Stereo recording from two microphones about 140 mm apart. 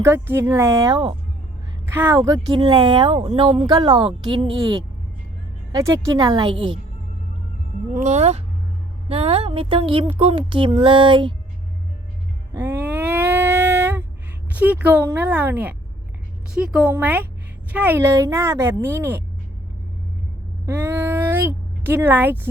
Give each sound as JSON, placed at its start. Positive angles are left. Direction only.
{"t": 0.0, "sound": "a woman's voice", "side_deg": -15}
{"t": 2.1, "sound": "speech", "side_deg": -25}
{"t": 7.9, "sound": "speech", "side_deg": -55}
{"t": 12.5, "sound": "a sound", "side_deg": -15}
{"t": 14.5, "sound": "a woman's voice", "side_deg": -10}
{"t": 20.7, "sound": "a sound", "side_deg": -15}